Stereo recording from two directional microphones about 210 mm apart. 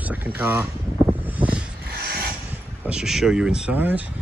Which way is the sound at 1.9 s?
45° right (ahead or behind).